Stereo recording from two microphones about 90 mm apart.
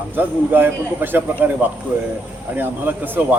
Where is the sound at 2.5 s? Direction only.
20° right (ahead or behind).